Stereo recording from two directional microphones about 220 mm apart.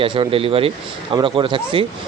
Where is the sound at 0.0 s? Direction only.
25° right (ahead or behind).